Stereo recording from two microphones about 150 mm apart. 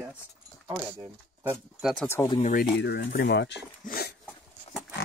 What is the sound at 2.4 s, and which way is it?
Speech, 60° left (ahead or behind).